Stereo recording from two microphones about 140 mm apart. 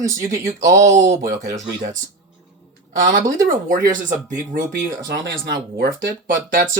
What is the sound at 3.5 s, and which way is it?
Speech, 75° right (ahead or behind).